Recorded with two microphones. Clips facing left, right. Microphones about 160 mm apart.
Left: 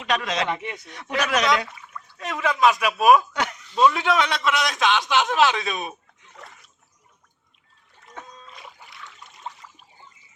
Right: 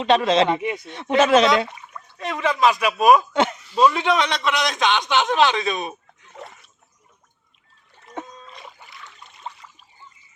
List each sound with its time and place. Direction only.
0.0 s speech: 30° right (ahead or behind)
2.1 s a man's voice: centre (ahead or behind)
3.3 s speech: 25° right (ahead or behind)
3.8 s a man's voice: centre (ahead or behind)
8.4 s splash: centre (ahead or behind)